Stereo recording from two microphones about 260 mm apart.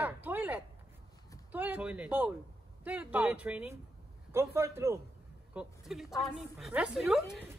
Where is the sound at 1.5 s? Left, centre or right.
Centre.